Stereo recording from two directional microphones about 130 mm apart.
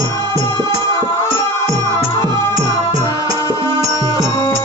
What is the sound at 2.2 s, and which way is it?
Music, 25° right (ahead or behind).